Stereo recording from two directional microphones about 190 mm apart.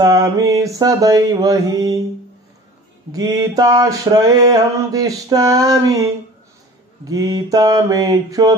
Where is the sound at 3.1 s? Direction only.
20° right (ahead or behind).